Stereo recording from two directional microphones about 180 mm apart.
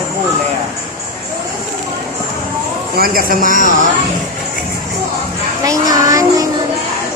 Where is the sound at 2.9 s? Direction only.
55° right (ahead or behind).